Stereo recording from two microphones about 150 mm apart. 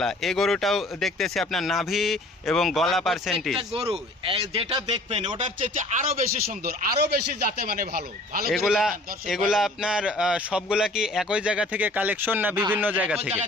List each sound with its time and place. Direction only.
0.0 s a man's voice: centre (ahead or behind)
3.8 s speech: 40° right (ahead or behind)
5.7 s speech: 55° right (ahead or behind)
7.6 s speech: 80° right
8.4 s a man's voice: 5° right (ahead or behind)